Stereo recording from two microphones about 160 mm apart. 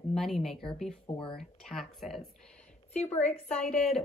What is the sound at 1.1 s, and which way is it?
Speech, 30° left (ahead or behind).